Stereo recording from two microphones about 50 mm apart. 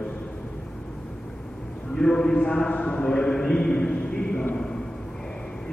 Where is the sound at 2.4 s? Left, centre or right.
Centre.